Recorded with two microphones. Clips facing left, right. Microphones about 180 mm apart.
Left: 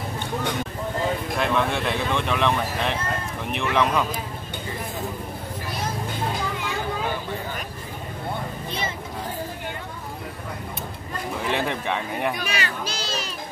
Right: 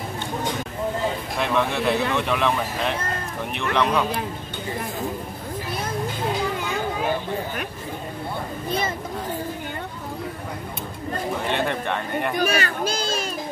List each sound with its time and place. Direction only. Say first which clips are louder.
1.4 s speech: right 2 dB; centre (ahead or behind)
11.4 s speech: left 2 dB; centre (ahead or behind)
12.4 s a child's voice: right 6 dB; 50° right (ahead or behind)